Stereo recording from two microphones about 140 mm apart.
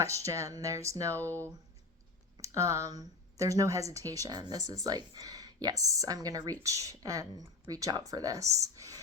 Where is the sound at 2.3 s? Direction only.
25° right (ahead or behind).